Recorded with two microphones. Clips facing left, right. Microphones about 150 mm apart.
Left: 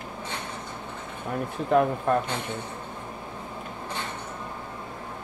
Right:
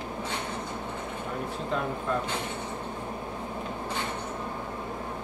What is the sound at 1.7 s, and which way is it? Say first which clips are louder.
Speech: left 9 dB; 55° left (ahead or behind).